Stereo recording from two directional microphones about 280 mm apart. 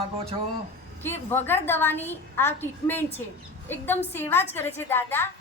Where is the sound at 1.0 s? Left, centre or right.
Centre.